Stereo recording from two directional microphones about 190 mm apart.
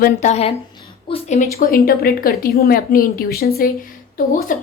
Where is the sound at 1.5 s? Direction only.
50° left (ahead or behind).